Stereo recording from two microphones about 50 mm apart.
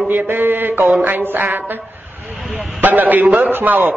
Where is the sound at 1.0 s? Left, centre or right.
Right.